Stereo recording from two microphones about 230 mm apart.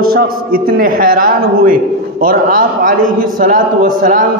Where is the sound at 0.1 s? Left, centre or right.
Right.